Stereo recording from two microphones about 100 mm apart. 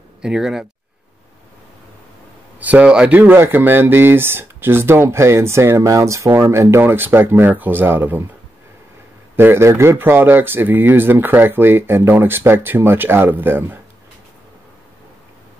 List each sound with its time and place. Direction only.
0.2 s speech: 5° right (ahead or behind)
2.6 s speech: 15° right (ahead or behind)
9.4 s speech: 25° right (ahead or behind)